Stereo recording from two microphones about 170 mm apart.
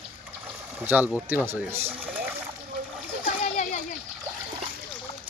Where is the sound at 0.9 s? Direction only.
10° right (ahead or behind).